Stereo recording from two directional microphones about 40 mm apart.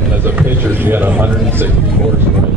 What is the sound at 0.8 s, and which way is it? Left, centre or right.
Speech, right.